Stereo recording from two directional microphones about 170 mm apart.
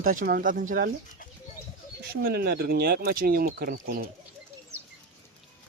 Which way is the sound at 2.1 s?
65° right (ahead or behind).